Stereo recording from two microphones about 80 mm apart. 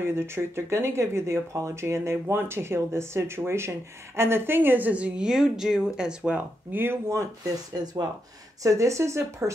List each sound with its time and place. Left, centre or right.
0.0 s speech: right; by 6.4 s centre
6.7 s speech: right
8.6 s speech: right